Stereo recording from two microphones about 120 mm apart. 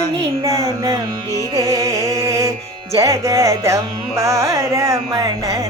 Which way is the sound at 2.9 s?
25° right (ahead or behind).